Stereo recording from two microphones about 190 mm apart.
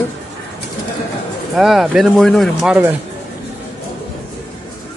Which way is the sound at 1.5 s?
Centre (ahead or behind).